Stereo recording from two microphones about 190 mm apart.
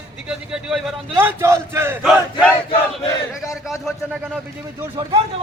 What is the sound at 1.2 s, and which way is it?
Battle cry, 15° right (ahead or behind).